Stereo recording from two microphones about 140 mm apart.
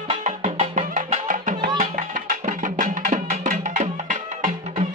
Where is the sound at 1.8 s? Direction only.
75° right (ahead or behind).